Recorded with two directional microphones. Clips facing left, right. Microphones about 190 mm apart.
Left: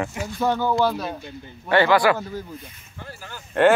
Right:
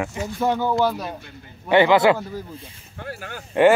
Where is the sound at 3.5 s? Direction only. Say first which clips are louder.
Right 2 dB; 10° right (ahead or behind).